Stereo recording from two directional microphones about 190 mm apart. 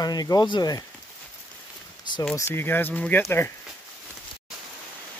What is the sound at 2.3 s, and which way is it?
Speech, 15° left (ahead or behind).